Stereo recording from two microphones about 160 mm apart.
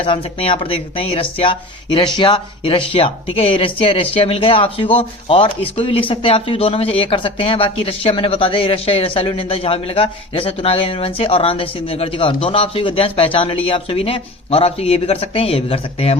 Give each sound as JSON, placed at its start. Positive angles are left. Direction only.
{"t": 0.0, "sound": "speech", "side_deg": 35}